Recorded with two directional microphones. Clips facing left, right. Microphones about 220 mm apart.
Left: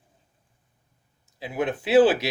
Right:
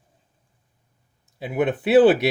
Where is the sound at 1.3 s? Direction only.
55° right (ahead or behind).